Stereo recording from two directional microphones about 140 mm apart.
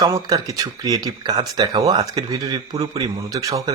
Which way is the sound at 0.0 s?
25° right (ahead or behind).